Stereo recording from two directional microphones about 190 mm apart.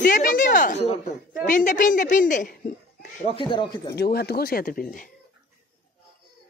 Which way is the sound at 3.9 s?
55° left (ahead or behind).